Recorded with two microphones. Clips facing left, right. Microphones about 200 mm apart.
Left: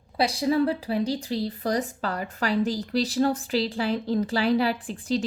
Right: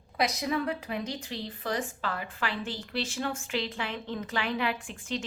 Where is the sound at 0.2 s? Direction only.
30° left (ahead or behind).